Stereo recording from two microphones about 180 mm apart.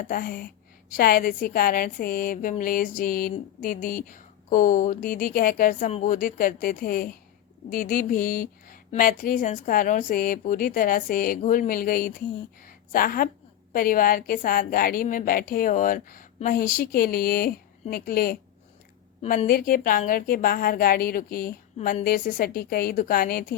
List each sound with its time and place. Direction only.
0.0 s a woman's voice: 50° left (ahead or behind)
19.2 s a woman's voice: 35° left (ahead or behind)
19.5 s a woman's voice: 55° left (ahead or behind)